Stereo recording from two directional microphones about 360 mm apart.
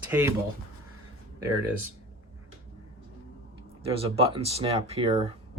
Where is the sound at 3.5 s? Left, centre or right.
Centre.